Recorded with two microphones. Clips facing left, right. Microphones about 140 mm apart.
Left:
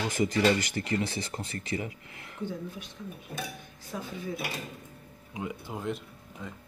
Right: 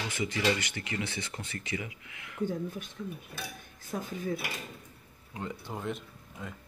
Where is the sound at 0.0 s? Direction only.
40° left (ahead or behind).